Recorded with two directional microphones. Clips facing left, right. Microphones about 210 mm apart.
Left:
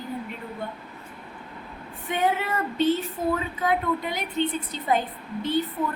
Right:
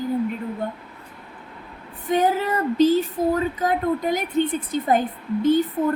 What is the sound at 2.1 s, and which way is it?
A woman's voice, 40° right (ahead or behind).